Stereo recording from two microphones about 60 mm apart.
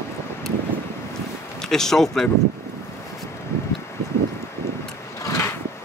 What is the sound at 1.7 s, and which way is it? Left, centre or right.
Speech, centre.